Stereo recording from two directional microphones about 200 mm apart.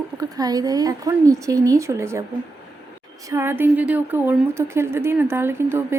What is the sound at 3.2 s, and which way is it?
Speech, 15° right (ahead or behind).